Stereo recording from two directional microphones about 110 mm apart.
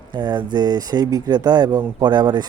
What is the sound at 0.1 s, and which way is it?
Speech, 45° right (ahead or behind).